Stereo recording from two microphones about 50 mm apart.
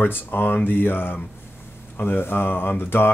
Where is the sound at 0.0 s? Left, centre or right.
Left.